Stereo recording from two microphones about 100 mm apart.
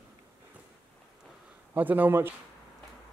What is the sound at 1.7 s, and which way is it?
Speech, 20° right (ahead or behind).